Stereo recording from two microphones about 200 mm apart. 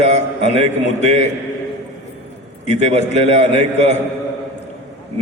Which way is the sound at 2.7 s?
35° right (ahead or behind).